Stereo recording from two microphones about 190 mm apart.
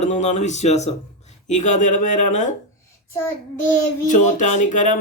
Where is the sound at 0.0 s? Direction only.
35° left (ahead or behind).